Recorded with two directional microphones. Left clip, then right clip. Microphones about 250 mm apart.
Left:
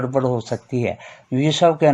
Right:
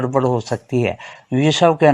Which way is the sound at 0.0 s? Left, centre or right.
Right.